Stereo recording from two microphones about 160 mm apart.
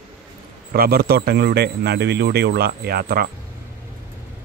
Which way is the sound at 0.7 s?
70° right (ahead or behind).